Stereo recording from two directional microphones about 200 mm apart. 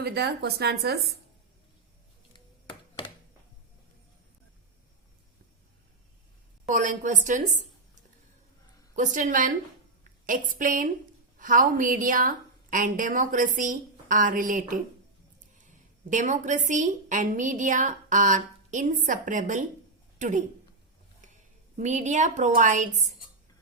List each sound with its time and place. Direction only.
0.0 s speech: 55° right (ahead or behind)
6.7 s a woman's voice: 40° right (ahead or behind)
9.0 s a woman's voice: 40° right (ahead or behind)
16.0 s a woman's voice: 40° right (ahead or behind)
21.8 s a woman's voice: 35° right (ahead or behind)